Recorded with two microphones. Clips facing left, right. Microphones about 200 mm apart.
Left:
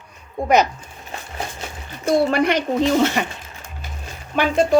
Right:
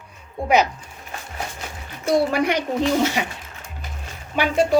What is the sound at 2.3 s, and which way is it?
Speech, 10° right (ahead or behind).